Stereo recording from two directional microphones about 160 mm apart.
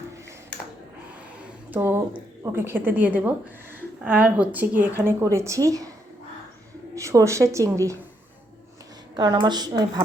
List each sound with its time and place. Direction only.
1.7 s a woman's voice: 15° right (ahead or behind)
6.9 s a woman's voice: 20° right (ahead or behind)
9.1 s a woman's voice: 25° right (ahead or behind)